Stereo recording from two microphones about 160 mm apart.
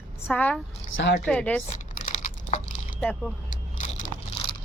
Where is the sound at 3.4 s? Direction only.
55° left (ahead or behind).